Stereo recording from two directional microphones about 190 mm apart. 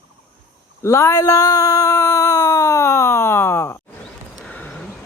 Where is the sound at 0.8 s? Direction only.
15° left (ahead or behind).